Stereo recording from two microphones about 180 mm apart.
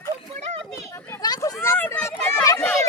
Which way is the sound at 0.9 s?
20° left (ahead or behind).